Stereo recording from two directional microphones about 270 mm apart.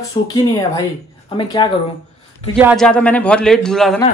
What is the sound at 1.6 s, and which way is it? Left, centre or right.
Speech, centre.